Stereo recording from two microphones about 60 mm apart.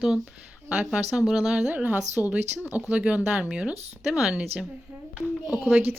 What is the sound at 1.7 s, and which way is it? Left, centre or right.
Speech, right.